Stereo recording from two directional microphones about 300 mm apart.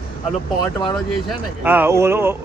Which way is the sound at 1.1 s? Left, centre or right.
Centre.